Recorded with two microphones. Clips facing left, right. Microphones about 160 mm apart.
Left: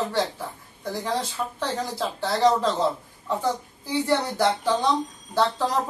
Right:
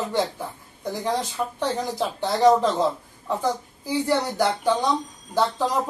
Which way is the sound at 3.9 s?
10° right (ahead or behind).